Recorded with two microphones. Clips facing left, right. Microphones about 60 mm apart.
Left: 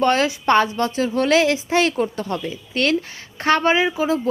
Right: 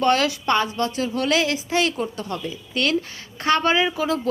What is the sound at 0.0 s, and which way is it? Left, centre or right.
A woman's voice, left.